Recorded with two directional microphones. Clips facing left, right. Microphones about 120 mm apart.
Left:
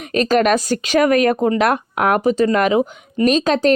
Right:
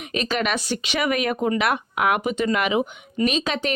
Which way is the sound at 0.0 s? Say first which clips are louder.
Left 9 dB; 40° left (ahead or behind).